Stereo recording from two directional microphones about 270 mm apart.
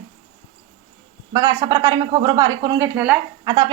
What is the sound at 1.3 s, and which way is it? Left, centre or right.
A woman's voice, centre.